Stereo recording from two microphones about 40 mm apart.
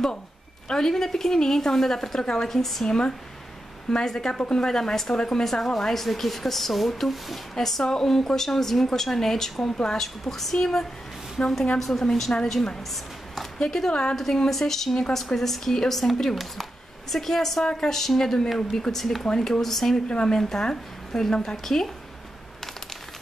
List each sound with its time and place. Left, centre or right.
0.7 s a woman's voice: centre
2.9 s a woman's voice: centre
12.9 s a sound: centre
13.7 s a woman's voice: centre
19.2 s speech: centre
19.6 s a woman's voice: centre